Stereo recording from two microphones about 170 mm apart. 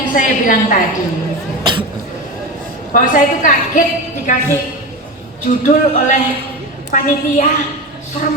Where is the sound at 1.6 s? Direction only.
25° right (ahead or behind).